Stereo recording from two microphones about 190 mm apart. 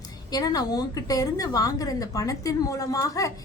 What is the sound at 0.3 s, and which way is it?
A woman's voice, 20° left (ahead or behind).